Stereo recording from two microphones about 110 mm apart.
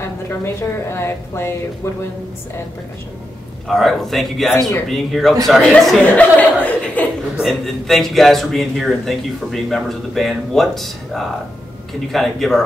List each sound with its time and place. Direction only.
0.0 s a woman's voice: 25° left (ahead or behind)
3.6 s a man's voice: centre (ahead or behind)
7.3 s a man's voice: centre (ahead or behind)